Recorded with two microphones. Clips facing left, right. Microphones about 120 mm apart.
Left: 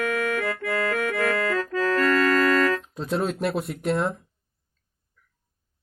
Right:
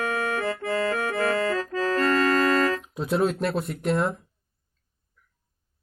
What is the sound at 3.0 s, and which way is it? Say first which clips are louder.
Speech: right 2 dB; 5° right (ahead or behind).